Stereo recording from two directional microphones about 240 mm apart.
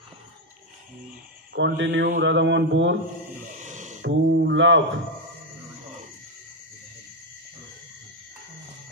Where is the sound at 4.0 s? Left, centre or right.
Right.